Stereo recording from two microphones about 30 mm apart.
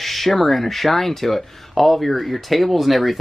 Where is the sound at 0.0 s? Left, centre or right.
Centre.